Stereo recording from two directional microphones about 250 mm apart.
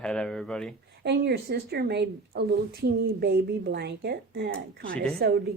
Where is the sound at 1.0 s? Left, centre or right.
Right.